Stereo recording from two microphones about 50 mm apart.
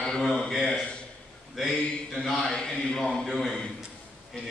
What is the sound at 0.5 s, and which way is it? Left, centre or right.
Speech, centre.